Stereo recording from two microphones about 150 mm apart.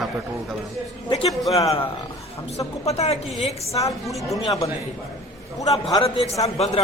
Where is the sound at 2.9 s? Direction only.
45° left (ahead or behind).